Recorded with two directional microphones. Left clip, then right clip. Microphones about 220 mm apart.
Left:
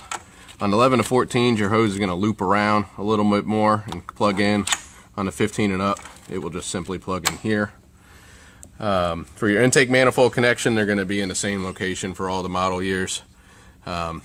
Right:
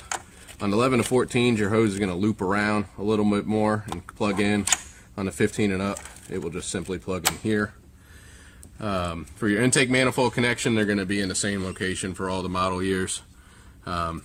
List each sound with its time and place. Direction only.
0.6 s speech: 40° left (ahead or behind)
8.8 s speech: 40° left (ahead or behind)